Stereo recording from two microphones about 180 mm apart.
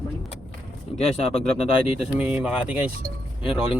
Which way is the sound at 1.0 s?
35° left (ahead or behind).